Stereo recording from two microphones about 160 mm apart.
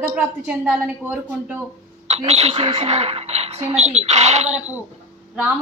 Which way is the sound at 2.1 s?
45° right (ahead or behind).